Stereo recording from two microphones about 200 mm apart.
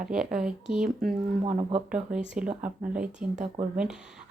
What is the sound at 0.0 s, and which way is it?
Speech, 5° right (ahead or behind).